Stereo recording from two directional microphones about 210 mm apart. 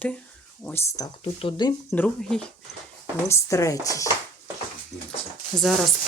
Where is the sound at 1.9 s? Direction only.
5° left (ahead or behind).